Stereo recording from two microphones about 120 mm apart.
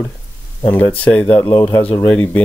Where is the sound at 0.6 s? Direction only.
15° left (ahead or behind).